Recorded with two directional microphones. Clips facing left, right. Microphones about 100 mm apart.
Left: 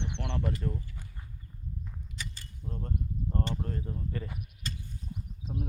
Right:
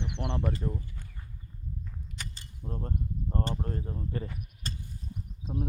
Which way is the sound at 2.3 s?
20° right (ahead or behind).